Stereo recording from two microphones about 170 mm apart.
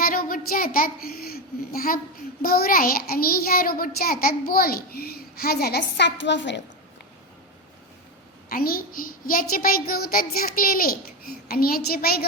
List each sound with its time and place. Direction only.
0.0 s a sound: 60° left (ahead or behind)
2.4 s child singing: 60° left (ahead or behind); by 6.6 s 90° left
8.4 s child singing: 60° left (ahead or behind)